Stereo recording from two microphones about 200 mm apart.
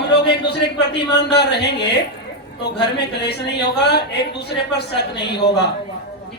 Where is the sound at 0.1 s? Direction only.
55° left (ahead or behind).